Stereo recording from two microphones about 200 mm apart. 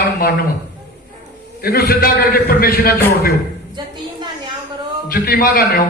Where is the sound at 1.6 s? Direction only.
50° left (ahead or behind).